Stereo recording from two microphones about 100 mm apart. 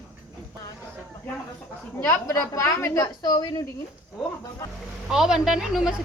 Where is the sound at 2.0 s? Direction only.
25° left (ahead or behind).